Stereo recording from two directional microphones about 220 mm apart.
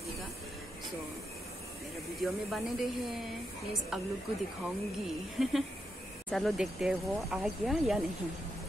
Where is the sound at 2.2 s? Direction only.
Centre (ahead or behind).